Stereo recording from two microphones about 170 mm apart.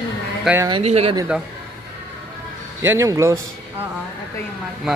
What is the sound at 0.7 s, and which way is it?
Speech, 35° right (ahead or behind).